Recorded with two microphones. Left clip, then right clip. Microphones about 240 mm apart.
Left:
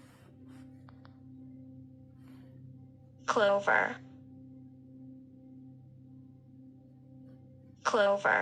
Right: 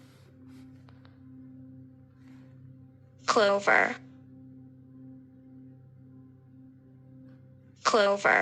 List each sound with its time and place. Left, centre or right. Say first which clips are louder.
3.2 s a woman's voice: right 3 dB; centre
7.8 s a woman's voice: right 3 dB; centre